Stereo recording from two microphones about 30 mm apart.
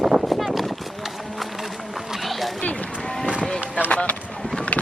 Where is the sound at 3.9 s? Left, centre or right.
Left.